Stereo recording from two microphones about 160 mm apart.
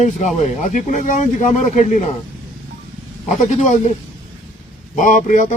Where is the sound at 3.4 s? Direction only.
45° left (ahead or behind).